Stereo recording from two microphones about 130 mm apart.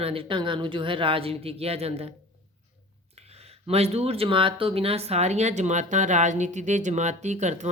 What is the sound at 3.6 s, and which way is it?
Speech, 50° right (ahead or behind).